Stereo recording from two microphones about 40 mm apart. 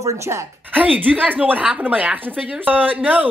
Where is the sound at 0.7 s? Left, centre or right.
Right.